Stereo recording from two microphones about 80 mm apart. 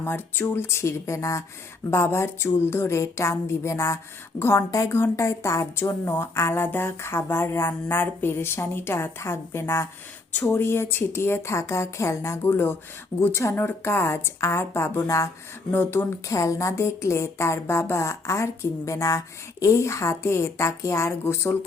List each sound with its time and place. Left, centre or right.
0.0 s speech: left
15.7 s speech: left
16.3 s speech: left